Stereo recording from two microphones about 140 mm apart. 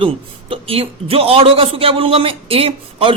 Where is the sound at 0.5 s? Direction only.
40° right (ahead or behind).